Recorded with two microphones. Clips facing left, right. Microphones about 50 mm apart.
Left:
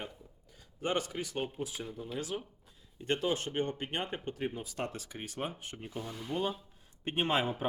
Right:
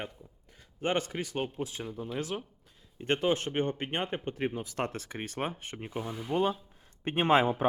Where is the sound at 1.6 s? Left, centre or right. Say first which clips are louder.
Right 2 dB; right.